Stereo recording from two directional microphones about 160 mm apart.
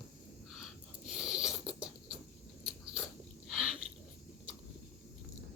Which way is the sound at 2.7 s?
5° right (ahead or behind).